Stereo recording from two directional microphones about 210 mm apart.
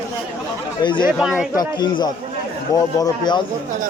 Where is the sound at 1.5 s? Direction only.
20° left (ahead or behind).